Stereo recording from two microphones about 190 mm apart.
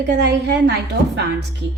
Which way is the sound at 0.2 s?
60° right (ahead or behind).